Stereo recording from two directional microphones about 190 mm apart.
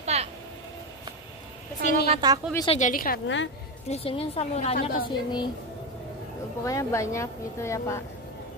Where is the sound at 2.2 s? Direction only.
20° right (ahead or behind).